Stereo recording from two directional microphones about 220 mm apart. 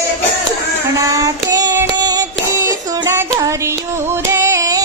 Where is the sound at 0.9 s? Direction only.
15° right (ahead or behind).